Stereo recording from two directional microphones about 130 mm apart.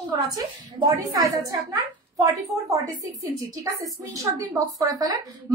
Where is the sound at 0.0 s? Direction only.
30° right (ahead or behind).